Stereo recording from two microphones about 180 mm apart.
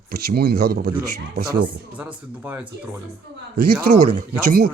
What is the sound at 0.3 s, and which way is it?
Speech, 60° right (ahead or behind).